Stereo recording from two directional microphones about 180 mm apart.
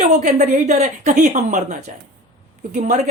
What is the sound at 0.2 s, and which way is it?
A woman's voice, 45° right (ahead or behind).